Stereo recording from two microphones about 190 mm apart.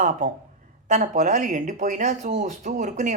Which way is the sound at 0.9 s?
40° right (ahead or behind).